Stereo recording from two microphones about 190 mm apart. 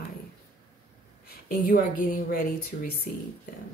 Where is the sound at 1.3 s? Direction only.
50° left (ahead or behind).